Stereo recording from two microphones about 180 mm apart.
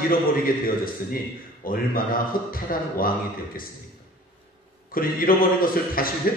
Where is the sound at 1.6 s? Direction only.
50° left (ahead or behind).